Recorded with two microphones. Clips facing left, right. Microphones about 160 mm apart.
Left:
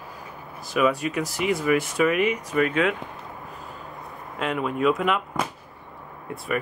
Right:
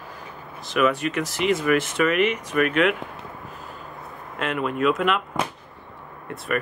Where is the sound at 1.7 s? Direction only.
70° right (ahead or behind).